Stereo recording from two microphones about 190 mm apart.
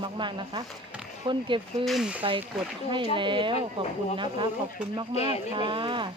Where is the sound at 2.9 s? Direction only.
25° right (ahead or behind).